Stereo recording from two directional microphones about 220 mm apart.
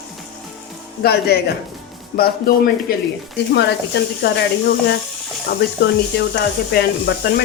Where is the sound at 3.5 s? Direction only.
50° left (ahead or behind).